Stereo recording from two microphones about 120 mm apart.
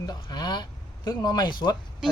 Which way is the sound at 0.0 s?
35° left (ahead or behind).